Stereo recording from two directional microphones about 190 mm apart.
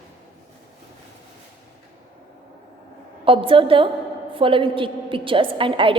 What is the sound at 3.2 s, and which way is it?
A woman's voice, 30° right (ahead or behind).